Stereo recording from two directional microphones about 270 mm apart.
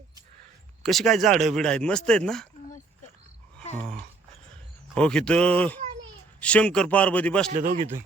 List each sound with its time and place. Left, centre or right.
0.8 s speech: centre
4.9 s speech: centre
7.5 s speech: right